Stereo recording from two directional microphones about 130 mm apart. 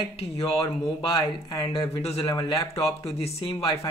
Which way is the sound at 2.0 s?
50° left (ahead or behind).